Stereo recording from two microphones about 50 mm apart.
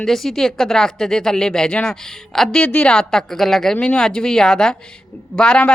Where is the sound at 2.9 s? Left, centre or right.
Centre.